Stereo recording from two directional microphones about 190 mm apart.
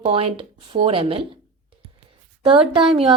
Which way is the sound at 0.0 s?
30° right (ahead or behind).